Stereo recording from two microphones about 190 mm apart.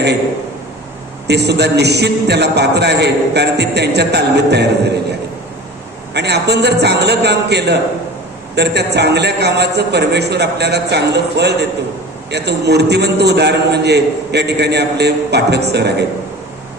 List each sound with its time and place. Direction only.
1.3 s a man's voice: 60° right (ahead or behind)
6.1 s a man's voice: 60° right (ahead or behind)